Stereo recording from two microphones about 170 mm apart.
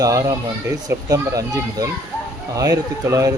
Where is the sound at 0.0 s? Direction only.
20° right (ahead or behind).